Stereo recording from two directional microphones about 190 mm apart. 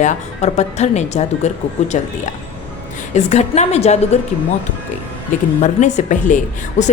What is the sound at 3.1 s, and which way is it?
A woman's voice, 35° left (ahead or behind).